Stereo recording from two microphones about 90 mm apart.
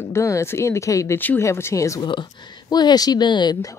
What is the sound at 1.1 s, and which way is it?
Speech, 20° left (ahead or behind).